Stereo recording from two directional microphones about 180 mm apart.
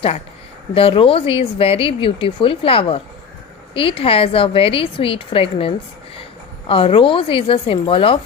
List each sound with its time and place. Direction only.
0.7 s a woman's voice: 30° left (ahead or behind)